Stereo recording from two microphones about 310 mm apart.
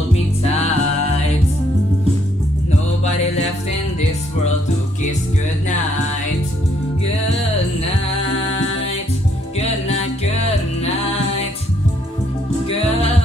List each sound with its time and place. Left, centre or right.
0.1 s music: centre
9.6 s music: centre
12.6 s music: centre